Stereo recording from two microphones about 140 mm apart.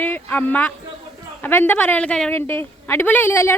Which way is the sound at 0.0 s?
10° left (ahead or behind).